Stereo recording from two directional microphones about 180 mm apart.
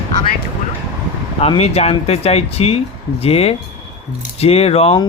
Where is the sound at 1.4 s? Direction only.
35° left (ahead or behind).